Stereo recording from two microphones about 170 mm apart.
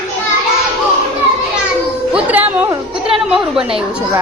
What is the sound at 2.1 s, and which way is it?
A woman's voice, 10° right (ahead or behind).